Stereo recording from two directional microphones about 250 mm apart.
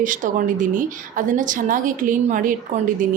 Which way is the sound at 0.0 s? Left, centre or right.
Right.